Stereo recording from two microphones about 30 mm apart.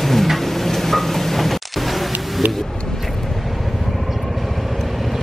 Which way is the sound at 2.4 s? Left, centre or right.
Right.